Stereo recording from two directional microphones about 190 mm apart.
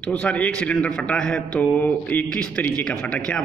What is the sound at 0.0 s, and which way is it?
A man's voice, 5° left (ahead or behind).